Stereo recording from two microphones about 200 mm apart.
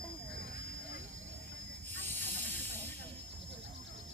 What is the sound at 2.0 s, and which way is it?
Hiss, 10° left (ahead or behind).